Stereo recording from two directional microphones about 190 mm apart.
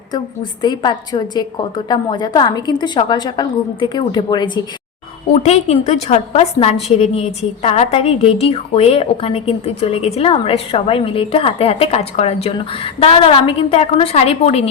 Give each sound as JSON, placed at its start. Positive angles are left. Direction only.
{"t": 0.6, "sound": "a woman's voice", "side_deg": 20}
{"t": 5.3, "sound": "a woman's voice", "side_deg": 35}